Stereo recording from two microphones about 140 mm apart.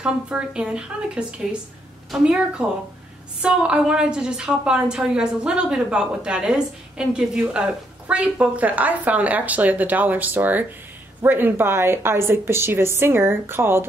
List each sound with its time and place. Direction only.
0.0 s a woman's voice: 5° right (ahead or behind)